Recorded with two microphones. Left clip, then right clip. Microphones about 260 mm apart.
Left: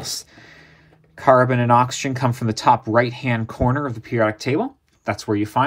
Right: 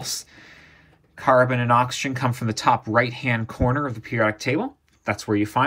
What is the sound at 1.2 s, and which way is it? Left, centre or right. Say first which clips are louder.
Speech: left 3 dB; left.